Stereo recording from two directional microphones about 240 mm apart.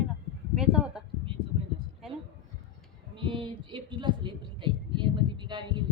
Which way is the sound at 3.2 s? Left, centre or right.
Centre.